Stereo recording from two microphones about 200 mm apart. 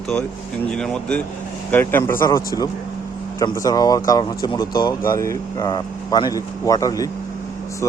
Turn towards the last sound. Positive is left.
turn(degrees=15)  # may be behind; listen again after turning